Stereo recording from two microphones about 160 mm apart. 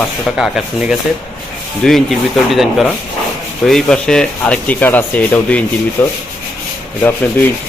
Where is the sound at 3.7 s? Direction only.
5° left (ahead or behind).